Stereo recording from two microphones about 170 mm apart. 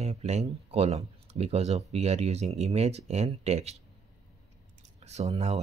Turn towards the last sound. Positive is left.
turn(degrees=-40)  # may be behind; listen again after turning